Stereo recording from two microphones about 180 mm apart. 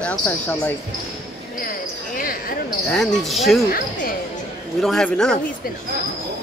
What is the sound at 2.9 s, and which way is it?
Speech, centre (ahead or behind).